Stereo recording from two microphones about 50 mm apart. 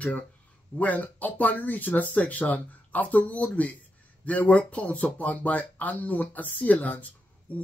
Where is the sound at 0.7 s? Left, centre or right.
Left.